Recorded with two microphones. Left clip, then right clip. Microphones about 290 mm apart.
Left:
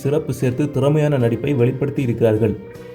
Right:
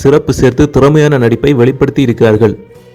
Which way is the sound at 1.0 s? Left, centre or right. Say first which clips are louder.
Right 9 dB; right.